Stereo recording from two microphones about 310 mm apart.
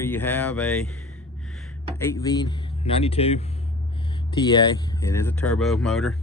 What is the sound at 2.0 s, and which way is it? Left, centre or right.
Speech, centre.